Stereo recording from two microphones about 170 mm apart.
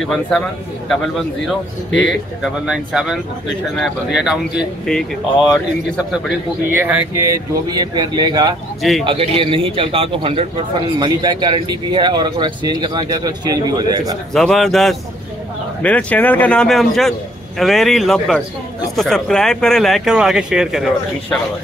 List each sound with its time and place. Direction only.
0.0 s speech: centre (ahead or behind)
2.0 s speech: 5° right (ahead or behind)
6.7 s a man's voice: 10° right (ahead or behind)
14.3 s a man's voice: centre (ahead or behind)